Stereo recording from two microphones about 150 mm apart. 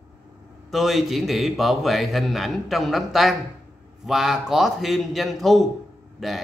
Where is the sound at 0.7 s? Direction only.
Centre (ahead or behind).